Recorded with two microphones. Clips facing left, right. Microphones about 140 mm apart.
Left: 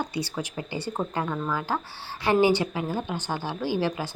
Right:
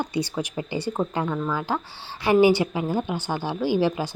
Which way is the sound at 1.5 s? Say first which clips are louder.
Right 2 dB; 20° right (ahead or behind).